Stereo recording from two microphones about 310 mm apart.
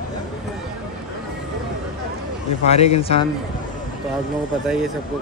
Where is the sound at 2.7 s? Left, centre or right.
Centre.